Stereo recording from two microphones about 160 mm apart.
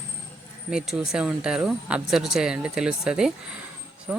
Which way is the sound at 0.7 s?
5° right (ahead or behind).